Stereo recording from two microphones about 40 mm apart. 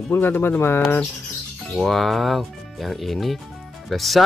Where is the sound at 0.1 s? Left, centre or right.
Left.